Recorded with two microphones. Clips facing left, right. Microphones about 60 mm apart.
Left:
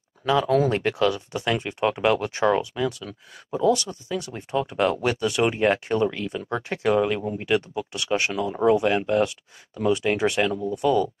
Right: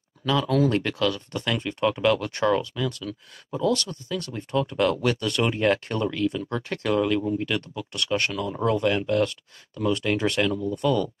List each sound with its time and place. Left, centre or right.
0.2 s speech: left
2.9 s speech: centre